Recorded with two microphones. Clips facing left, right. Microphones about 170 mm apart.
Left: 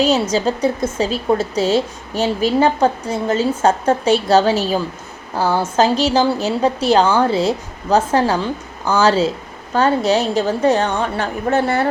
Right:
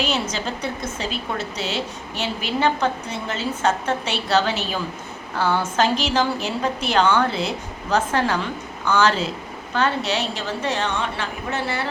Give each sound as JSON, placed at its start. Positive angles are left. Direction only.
{"t": 0.0, "sound": "a woman's voice", "side_deg": 35}